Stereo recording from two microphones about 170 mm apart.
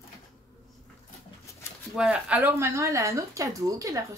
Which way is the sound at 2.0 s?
5° right (ahead or behind).